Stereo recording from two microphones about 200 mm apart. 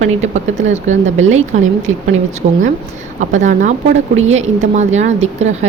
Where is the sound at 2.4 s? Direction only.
40° right (ahead or behind).